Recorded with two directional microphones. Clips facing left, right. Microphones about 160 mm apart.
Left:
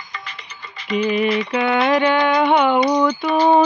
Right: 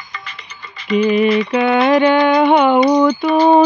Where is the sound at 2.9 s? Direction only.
30° right (ahead or behind).